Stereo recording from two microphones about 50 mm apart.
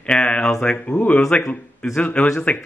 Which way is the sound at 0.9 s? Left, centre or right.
Left.